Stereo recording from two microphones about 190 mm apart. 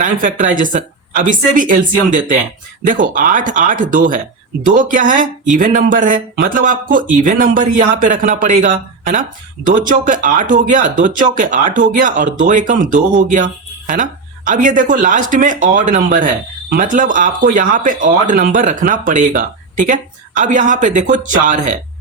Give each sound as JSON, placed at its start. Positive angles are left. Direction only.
{"t": 0.0, "sound": "speech", "side_deg": -45}